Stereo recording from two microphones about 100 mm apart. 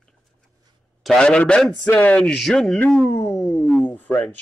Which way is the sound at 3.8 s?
15° left (ahead or behind).